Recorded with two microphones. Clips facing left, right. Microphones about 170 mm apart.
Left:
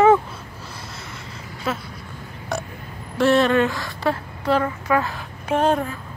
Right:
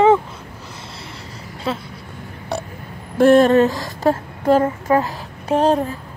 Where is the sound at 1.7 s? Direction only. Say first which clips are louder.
Right 2 dB; 30° right (ahead or behind).